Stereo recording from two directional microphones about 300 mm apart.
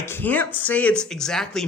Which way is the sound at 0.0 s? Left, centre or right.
Centre.